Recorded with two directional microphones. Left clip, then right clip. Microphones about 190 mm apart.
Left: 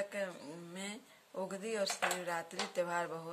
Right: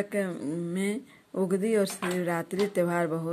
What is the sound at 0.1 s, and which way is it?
Speech, 35° right (ahead or behind).